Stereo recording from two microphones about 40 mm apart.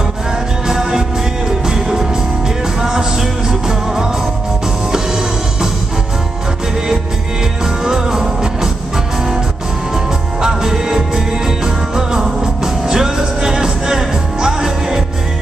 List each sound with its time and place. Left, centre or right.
0.7 s music: centre
7.6 s music: centre
9.9 s music: centre